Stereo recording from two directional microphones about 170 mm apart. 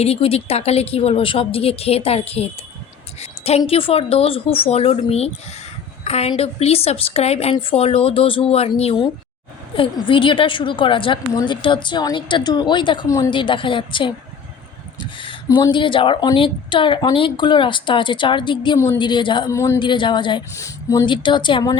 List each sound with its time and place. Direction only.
0.0 s a woman's voice: 35° left (ahead or behind)
3.2 s a sound: 40° left (ahead or behind)
3.6 s a woman's voice: 30° left (ahead or behind)
13.4 s a woman's voice: 30° left (ahead or behind)
15.4 s a woman's voice: 25° left (ahead or behind)
19.5 s speech: 15° left (ahead or behind)
19.8 s a woman's voice: 30° left (ahead or behind)